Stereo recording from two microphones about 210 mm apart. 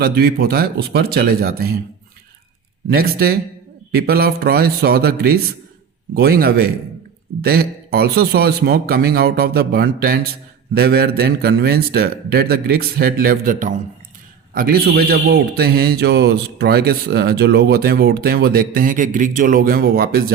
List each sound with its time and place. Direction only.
0.0 s a man's voice: 45° right (ahead or behind)
2.9 s a man's voice: 45° right (ahead or behind)